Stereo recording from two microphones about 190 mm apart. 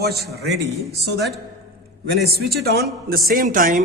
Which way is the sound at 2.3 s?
60° right (ahead or behind).